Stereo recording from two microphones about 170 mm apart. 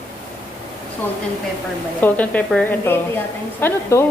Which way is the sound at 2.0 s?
10° left (ahead or behind).